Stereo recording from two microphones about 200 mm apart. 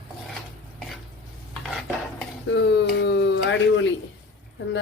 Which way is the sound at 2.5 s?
60° left (ahead or behind).